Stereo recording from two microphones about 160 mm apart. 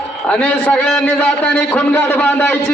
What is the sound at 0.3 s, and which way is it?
A man's voice, 10° left (ahead or behind).